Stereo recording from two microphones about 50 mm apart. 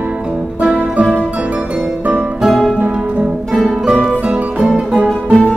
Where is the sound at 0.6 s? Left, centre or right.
Right.